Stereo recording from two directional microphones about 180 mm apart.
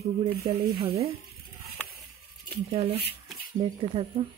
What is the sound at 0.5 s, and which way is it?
Speech, 35° right (ahead or behind).